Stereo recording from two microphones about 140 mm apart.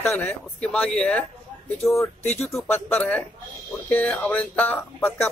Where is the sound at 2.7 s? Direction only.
15° left (ahead or behind).